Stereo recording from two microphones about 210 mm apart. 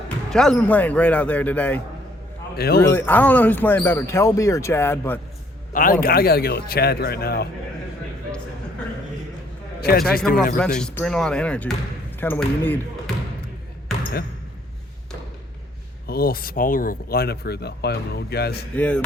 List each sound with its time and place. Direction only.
0.3 s speech: 5° left (ahead or behind)
2.6 s speech: 50° left (ahead or behind)
2.8 s speech: 10° left (ahead or behind)
5.7 s speech: 40° left (ahead or behind)
10.1 s speech: 45° left (ahead or behind)
10.8 s speech: 5° left (ahead or behind)
13.9 s basketball bounce: centre (ahead or behind)
16.0 s speech: 45° left (ahead or behind)
18.7 s speech: 5° left (ahead or behind)